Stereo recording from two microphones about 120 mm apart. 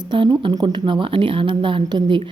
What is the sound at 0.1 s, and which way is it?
A woman's voice, 40° right (ahead or behind).